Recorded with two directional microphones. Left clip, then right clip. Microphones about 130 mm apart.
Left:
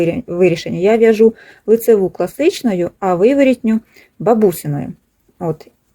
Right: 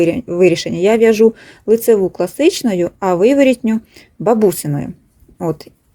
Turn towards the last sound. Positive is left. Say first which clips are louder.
# right 1 dB
turn(degrees=-35)  # may be behind; listen again after turning